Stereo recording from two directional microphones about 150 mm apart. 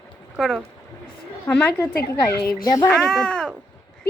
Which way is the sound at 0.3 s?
Centre (ahead or behind).